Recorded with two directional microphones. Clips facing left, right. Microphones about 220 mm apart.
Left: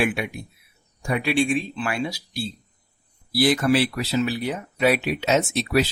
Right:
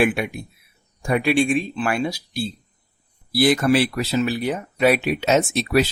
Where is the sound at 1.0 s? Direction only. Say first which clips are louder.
Right 3 dB; 50° right (ahead or behind).